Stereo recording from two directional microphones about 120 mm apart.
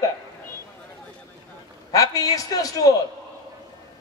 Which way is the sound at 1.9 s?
30° left (ahead or behind).